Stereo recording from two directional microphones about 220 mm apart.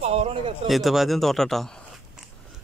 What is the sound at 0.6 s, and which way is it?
Speech, centre (ahead or behind).